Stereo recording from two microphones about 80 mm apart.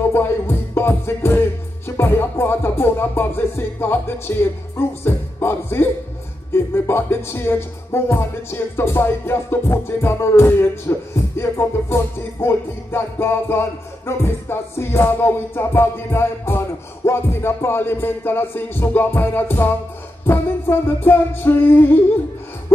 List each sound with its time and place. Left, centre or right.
0.1 s music: left